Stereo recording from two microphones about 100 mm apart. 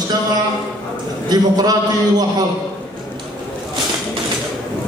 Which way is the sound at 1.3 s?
40° right (ahead or behind).